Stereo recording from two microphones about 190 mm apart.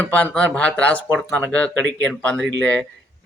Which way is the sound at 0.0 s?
5° left (ahead or behind).